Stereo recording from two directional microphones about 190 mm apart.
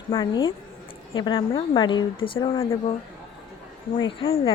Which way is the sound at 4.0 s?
25° left (ahead or behind).